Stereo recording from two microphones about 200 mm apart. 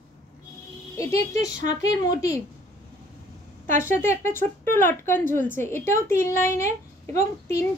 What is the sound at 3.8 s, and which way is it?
Speech, 10° left (ahead or behind).